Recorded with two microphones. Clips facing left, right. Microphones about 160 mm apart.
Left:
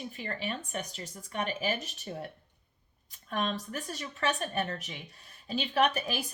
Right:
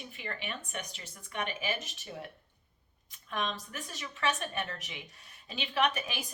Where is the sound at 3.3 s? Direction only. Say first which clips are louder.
Left 3 dB; 40° left (ahead or behind).